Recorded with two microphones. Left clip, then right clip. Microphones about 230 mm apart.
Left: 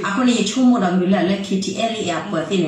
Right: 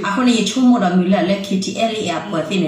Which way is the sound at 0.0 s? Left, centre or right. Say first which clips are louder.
Right 2 dB; right.